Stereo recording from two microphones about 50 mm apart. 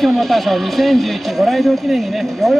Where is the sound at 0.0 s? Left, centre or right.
Centre.